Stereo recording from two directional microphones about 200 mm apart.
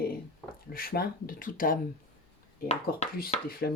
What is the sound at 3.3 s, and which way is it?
Speech, 35° left (ahead or behind).